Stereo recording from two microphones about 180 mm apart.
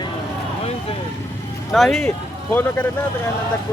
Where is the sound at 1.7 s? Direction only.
Centre (ahead or behind).